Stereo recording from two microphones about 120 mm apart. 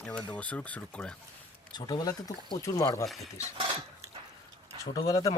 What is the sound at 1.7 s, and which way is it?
Speech, 35° left (ahead or behind).